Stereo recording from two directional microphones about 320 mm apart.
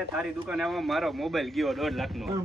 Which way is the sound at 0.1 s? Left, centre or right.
Centre.